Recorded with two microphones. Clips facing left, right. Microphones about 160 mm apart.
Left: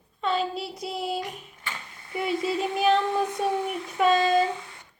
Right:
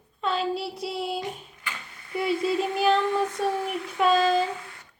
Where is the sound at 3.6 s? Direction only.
Centre (ahead or behind).